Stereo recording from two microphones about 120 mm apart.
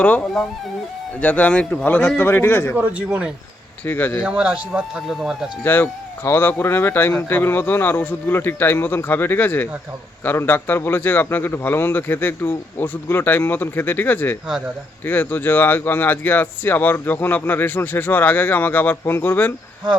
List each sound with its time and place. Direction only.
0.0 s speech: 15° left (ahead or behind)
2.7 s speech: 15° right (ahead or behind)
3.8 s speech: 15° left (ahead or behind)
4.2 s speech: 10° right (ahead or behind)
5.6 s speech: 15° left (ahead or behind)